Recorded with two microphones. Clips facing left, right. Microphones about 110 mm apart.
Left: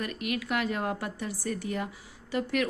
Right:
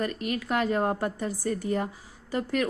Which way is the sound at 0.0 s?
35° right (ahead or behind).